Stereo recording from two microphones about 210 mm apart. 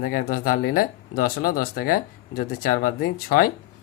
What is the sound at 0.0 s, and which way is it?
Speech, 40° left (ahead or behind).